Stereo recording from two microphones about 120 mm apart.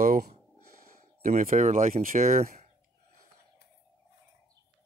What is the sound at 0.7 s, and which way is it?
Speech, 90° right.